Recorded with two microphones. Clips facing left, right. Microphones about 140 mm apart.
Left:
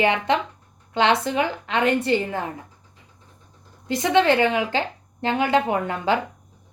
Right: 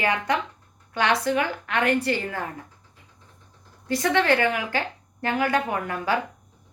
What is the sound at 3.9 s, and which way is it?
A woman's voice, 20° left (ahead or behind).